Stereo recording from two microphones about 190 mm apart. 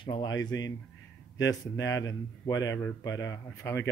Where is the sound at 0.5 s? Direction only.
80° left.